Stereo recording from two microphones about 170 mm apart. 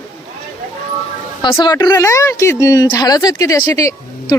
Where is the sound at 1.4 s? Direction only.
25° left (ahead or behind).